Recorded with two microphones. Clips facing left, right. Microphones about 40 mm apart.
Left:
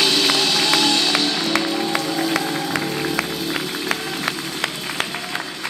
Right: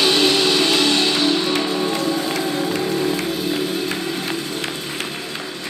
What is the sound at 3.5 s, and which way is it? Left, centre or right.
Music, left.